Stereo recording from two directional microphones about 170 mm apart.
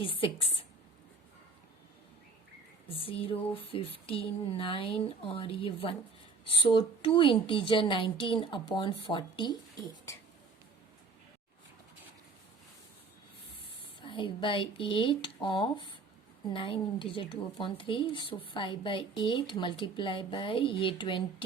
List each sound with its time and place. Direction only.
0.0 s speech: 30° left (ahead or behind)
2.8 s a woman's voice: 35° left (ahead or behind)
14.0 s a woman's voice: 30° left (ahead or behind)